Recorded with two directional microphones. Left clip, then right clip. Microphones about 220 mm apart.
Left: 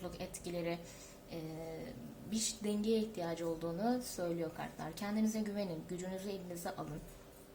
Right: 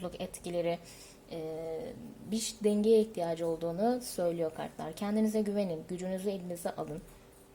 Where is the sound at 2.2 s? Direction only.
40° right (ahead or behind).